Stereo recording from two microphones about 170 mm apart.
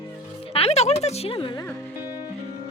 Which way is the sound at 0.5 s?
35° left (ahead or behind).